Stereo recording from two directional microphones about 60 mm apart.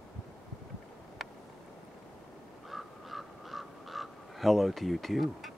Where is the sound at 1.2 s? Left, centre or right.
Centre.